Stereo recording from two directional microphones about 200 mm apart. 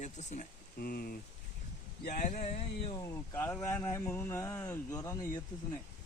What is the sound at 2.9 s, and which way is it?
Speech, 15° left (ahead or behind).